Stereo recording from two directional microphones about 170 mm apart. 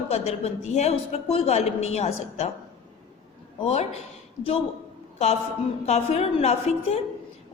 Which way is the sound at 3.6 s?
35° left (ahead or behind).